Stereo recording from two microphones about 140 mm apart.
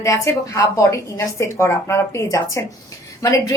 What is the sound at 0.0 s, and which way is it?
Speech, 20° left (ahead or behind).